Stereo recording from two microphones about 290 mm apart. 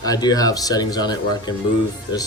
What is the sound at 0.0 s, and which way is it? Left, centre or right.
Speech, centre.